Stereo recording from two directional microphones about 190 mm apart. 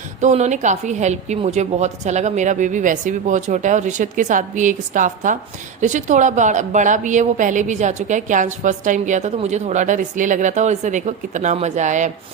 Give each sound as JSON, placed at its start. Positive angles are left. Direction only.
{"t": 0.2, "sound": "a woman's voice", "side_deg": -40}